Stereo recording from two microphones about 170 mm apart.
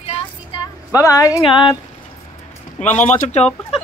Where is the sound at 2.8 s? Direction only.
45° left (ahead or behind).